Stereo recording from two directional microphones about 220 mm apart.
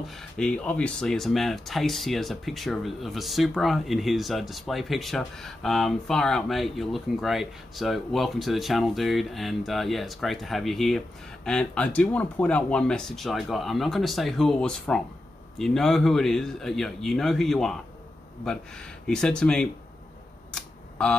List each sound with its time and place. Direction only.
0.0 s speech: centre (ahead or behind)
20.5 s camera: 5° left (ahead or behind)